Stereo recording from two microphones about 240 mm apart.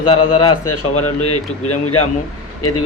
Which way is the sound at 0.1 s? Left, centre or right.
Left.